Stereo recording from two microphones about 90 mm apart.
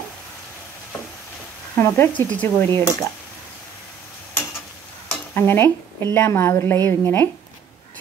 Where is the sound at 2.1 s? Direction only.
15° left (ahead or behind).